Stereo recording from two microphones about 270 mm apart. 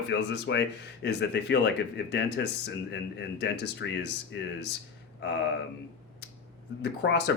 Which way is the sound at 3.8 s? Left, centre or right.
Left.